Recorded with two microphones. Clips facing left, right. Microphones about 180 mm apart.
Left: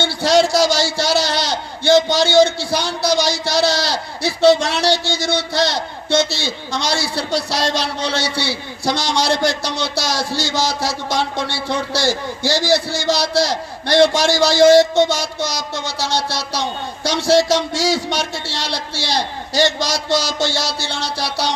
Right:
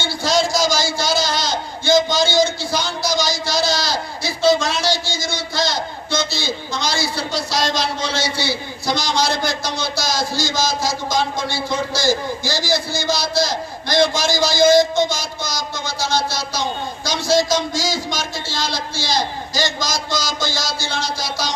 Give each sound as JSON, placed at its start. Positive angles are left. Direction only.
{"t": 0.0, "sound": "a man's voice", "side_deg": 70}